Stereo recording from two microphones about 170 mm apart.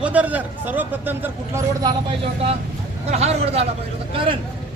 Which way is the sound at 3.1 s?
40° right (ahead or behind).